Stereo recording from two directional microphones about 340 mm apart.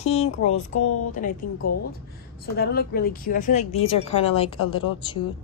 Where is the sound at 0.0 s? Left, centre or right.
Centre.